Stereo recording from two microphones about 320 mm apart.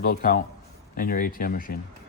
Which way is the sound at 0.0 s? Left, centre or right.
Left.